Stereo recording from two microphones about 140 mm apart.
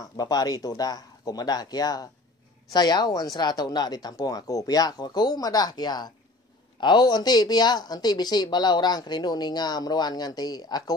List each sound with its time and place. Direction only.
0.0 s speech: 25° left (ahead or behind)